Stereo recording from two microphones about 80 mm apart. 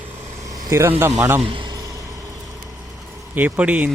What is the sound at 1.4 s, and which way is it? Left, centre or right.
Speech, right.